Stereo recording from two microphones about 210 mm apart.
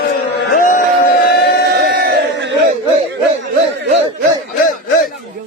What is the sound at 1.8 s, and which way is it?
Crowd, 50° right (ahead or behind).